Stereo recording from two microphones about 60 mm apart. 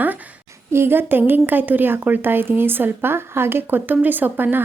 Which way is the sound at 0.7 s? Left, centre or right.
Right.